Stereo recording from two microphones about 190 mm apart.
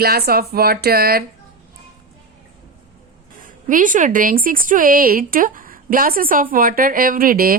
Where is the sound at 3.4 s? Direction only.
45° right (ahead or behind).